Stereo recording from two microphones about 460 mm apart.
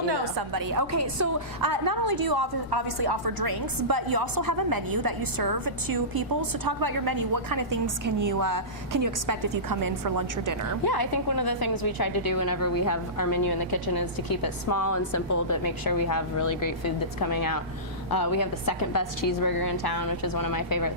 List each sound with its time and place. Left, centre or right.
0.1 s a woman's voice: right
10.8 s a woman's voice: left